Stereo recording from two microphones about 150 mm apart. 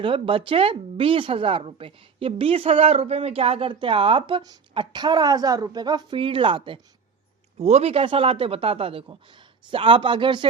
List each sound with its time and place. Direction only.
0.0 s speech: 35° right (ahead or behind)
7.6 s speech: 45° right (ahead or behind)